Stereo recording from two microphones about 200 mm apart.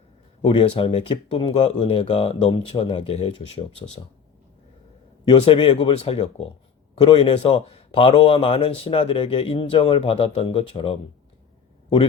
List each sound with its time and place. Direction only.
0.4 s speech: 30° left (ahead or behind)
5.3 s speech: 25° left (ahead or behind)